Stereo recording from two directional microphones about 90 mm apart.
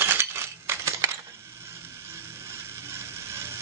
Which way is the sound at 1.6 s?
30° right (ahead or behind).